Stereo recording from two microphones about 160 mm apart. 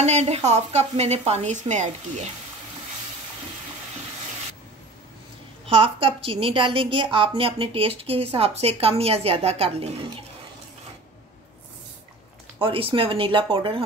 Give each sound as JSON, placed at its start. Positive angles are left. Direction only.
{"t": 0.0, "sound": "a woman's voice", "side_deg": -40}
{"t": 5.7, "sound": "a woman's voice", "side_deg": -35}
{"t": 12.5, "sound": "a woman's voice", "side_deg": -35}